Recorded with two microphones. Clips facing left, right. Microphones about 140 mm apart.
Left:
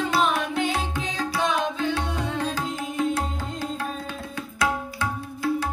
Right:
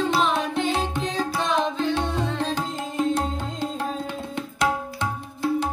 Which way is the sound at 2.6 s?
20° right (ahead or behind).